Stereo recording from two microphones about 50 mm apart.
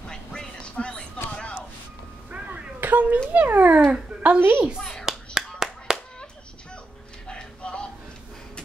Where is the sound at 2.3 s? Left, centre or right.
Right.